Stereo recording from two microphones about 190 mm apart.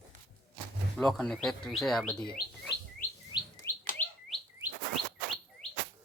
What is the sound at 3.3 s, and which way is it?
Chirp tone, 25° left (ahead or behind).